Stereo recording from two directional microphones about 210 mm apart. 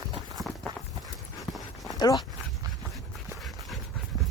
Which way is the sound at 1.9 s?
15° left (ahead or behind).